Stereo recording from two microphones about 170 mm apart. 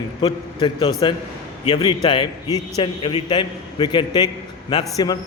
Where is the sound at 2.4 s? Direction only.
15° right (ahead or behind).